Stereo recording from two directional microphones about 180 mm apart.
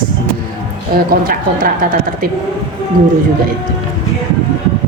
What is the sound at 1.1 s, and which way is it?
Speech, 55° right (ahead or behind).